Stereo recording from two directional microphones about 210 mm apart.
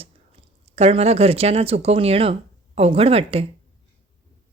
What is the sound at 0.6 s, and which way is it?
A woman's voice, 30° right (ahead or behind).